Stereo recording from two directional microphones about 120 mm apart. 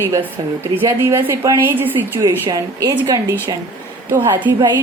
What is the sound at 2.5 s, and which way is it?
Speech, 35° right (ahead or behind).